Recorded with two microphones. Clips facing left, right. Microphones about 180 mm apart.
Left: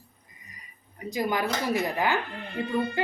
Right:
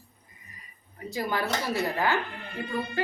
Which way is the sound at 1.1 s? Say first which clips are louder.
Left 2 dB; 15° left (ahead or behind).